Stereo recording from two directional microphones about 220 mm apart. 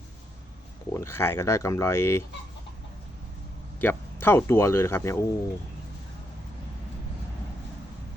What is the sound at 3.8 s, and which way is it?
Speech, 10° left (ahead or behind).